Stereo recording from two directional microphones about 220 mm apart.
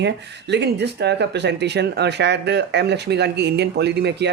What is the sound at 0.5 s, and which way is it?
A woman's voice, 50° right (ahead or behind).